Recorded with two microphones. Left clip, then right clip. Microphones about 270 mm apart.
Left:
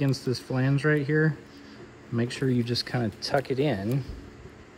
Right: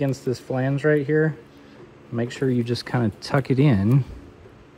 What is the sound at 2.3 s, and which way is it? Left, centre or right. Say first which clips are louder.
Speech: right 5 dB; centre.